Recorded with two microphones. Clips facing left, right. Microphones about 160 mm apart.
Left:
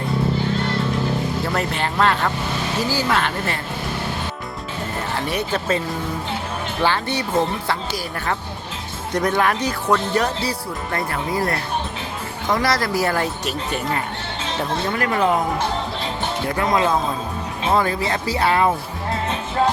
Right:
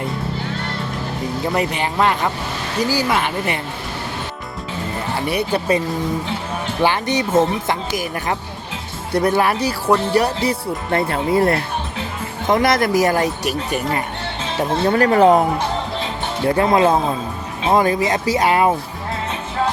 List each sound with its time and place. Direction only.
1.5 s speech: 10° right (ahead or behind)
5.1 s speech: 10° right (ahead or behind)
6.8 s speech: 15° right (ahead or behind)
10.5 s speech: 25° right (ahead or behind)
14.8 s speech: 35° right (ahead or behind)
16.6 s speech: 25° right (ahead or behind)